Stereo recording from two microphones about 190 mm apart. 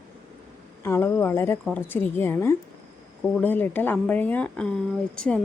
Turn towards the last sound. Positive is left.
turn(degrees=5)  # may be behind; listen again after turning